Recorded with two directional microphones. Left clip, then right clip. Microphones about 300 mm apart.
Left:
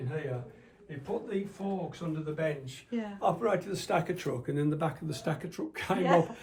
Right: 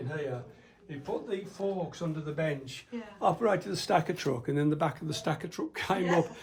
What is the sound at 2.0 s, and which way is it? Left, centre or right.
Speech, right.